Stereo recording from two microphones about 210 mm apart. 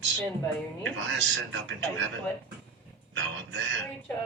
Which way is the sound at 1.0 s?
60° right (ahead or behind).